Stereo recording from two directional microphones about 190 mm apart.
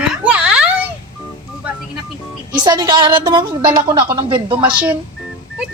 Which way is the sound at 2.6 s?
20° right (ahead or behind).